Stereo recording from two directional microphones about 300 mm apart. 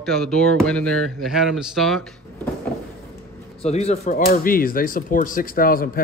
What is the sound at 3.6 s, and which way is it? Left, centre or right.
A man's voice, left.